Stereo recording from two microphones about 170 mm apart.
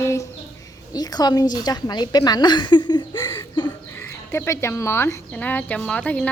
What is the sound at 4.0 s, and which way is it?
A woman's voice, 15° left (ahead or behind).